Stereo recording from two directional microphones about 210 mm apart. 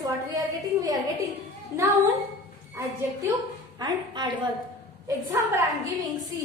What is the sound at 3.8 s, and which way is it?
A woman's voice, 20° right (ahead or behind).